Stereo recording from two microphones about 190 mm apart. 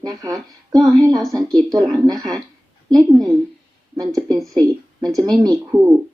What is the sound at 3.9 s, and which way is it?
Speech, 20° right (ahead or behind).